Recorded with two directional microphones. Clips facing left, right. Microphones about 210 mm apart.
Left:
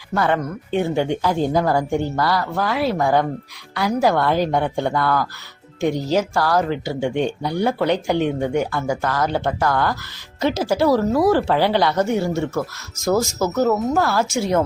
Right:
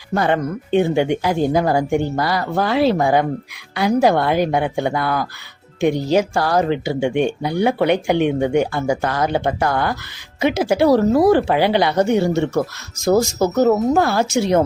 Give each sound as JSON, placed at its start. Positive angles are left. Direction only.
{"t": 0.1, "sound": "speech", "side_deg": -20}
{"t": 2.4, "sound": "speech", "side_deg": -25}